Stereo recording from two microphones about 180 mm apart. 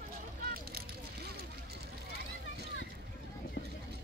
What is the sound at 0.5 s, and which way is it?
Vehicle, 60° right (ahead or behind).